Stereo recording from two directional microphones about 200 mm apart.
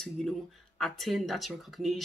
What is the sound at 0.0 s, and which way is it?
Speech, 5° left (ahead or behind).